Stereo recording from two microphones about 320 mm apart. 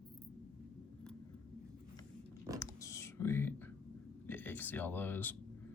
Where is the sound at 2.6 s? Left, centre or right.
Centre.